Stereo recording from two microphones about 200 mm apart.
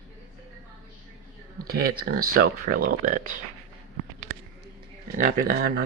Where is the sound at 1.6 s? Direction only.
50° right (ahead or behind).